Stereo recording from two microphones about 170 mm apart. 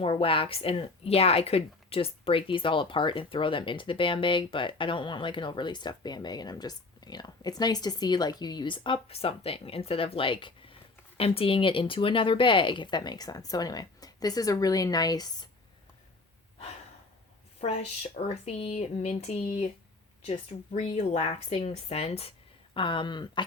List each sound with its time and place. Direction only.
0.0 s speech: 35° left (ahead or behind)
17.6 s speech: 40° left (ahead or behind)